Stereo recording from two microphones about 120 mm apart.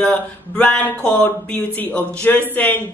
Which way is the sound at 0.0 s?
10° left (ahead or behind).